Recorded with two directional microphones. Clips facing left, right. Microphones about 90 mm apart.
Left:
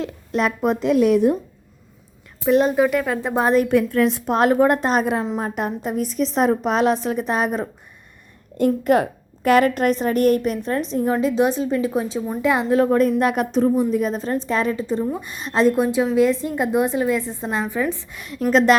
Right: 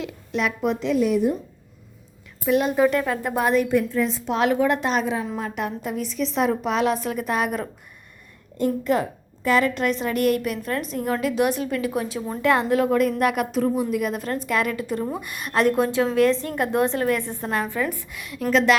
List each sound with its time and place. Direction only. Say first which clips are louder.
0.0 s a woman's voice: left 4 dB; 40° left (ahead or behind)
0.9 s a woman's voice: left 5 dB; 70° left (ahead or behind)
2.4 s a woman's voice: left 4 dB; 30° left (ahead or behind)
2.7 s a woman's voice: left 1 dB; 10° left (ahead or behind)
3.2 s a woman's voice: left 3 dB; 20° left (ahead or behind)
3.4 s a woman's voice: left 3 dB; 40° left (ahead or behind)
3.7 s a woman's voice: left 4 dB; 75° left (ahead or behind)
4.3 s a woman's voice: left 3 dB; 45° left (ahead or behind)
8.5 s a woman's voice: left 5 dB; 55° left (ahead or behind); by 18.0 s 20° left (ahead or behind)
18.1 s a woman's voice: left 3 dB; 35° left (ahead or behind)